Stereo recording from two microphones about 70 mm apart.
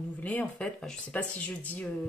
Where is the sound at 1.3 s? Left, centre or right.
Left.